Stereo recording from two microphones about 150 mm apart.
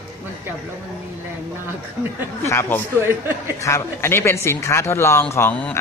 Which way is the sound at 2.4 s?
15° left (ahead or behind).